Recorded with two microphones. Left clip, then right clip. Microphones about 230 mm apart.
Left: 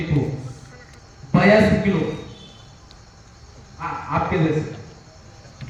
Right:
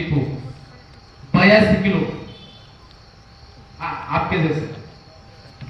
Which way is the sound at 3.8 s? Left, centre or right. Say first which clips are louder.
Right 1 dB; right.